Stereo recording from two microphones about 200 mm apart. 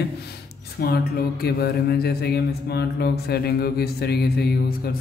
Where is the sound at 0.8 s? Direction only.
50° left (ahead or behind).